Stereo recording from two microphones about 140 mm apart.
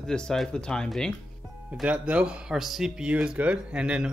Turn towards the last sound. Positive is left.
turn(degrees=-5)  # may be behind; listen again after turning